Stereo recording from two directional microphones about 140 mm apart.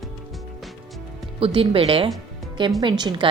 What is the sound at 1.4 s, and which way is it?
Speech, 40° right (ahead or behind).